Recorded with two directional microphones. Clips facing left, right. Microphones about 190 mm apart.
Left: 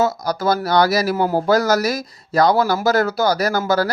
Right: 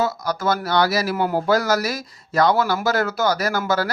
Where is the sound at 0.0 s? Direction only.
40° left (ahead or behind).